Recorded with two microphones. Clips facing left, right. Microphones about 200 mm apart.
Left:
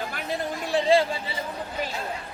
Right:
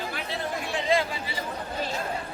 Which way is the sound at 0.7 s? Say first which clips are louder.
Left 6 dB; 30° left (ahead or behind).